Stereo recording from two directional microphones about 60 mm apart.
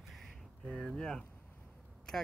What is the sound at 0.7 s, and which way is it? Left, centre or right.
Speech, centre.